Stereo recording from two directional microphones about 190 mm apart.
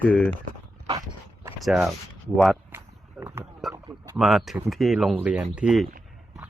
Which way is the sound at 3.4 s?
Centre (ahead or behind).